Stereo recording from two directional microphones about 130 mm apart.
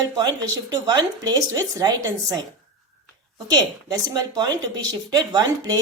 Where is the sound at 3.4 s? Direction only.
30° right (ahead or behind).